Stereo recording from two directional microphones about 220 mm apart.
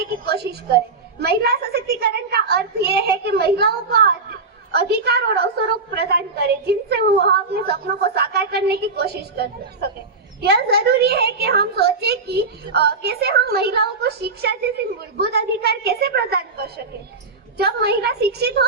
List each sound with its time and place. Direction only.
0.0 s a woman's voice: 45° right (ahead or behind)